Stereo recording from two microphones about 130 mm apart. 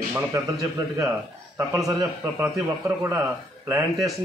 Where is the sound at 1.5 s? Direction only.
25° right (ahead or behind).